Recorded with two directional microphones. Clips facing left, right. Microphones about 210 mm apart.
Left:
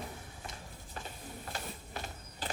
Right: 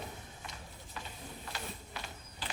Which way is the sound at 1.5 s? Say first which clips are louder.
Left 2 dB; 45° left (ahead or behind).